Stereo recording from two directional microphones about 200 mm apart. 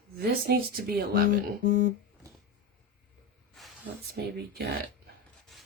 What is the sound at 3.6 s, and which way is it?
Snake, centre (ahead or behind).